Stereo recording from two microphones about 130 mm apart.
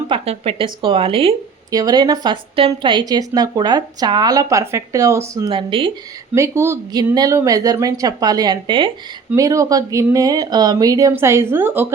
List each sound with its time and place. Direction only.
0.1 s speech: 45° right (ahead or behind)
1.7 s a woman's voice: 30° right (ahead or behind)
5.5 s speech: 40° right (ahead or behind)
6.3 s a woman's voice: 20° right (ahead or behind); by 8.9 s 40° right (ahead or behind)
9.3 s a woman's voice: 25° right (ahead or behind)